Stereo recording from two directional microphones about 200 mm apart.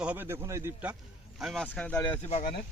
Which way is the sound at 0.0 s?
10° right (ahead or behind).